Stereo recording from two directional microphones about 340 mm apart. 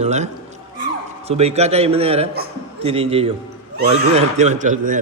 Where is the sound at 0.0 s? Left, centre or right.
Centre.